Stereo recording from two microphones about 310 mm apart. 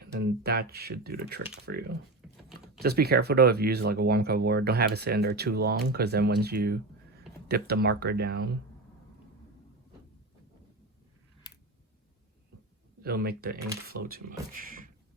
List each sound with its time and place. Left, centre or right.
0.0 s speech: right
13.0 s speech: right